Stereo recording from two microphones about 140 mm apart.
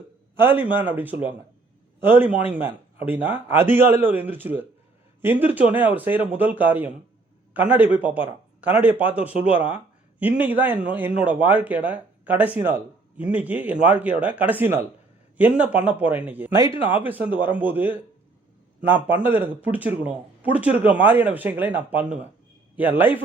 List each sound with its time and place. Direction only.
0.3 s a man's voice: 15° right (ahead or behind)